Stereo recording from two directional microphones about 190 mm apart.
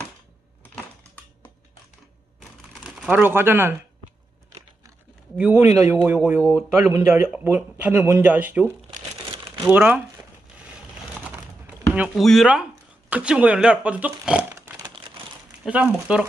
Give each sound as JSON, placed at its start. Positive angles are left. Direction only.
{"t": 0.7, "sound": "typing", "side_deg": 5}
{"t": 2.7, "sound": "speech", "side_deg": 0}
{"t": 5.4, "sound": "speech", "side_deg": -15}
{"t": 10.6, "sound": "a sound", "side_deg": -5}
{"t": 12.3, "sound": "speech", "side_deg": 0}
{"t": 15.6, "sound": "speech", "side_deg": -5}